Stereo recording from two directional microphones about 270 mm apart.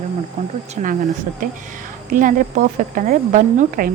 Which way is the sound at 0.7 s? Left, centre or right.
Right.